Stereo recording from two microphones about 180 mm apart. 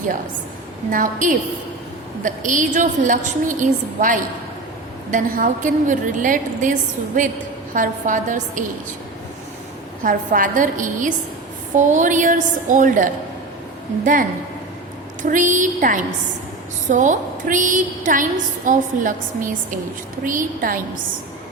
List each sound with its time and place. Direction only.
0.9 s a woman's voice: 45° right (ahead or behind)
10.0 s a woman's voice: 45° right (ahead or behind)